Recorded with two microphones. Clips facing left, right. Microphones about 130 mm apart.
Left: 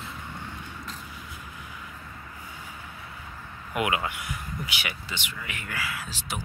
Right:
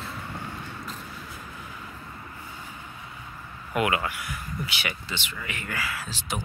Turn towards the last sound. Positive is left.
turn(degrees=10)  # may be behind; listen again after turning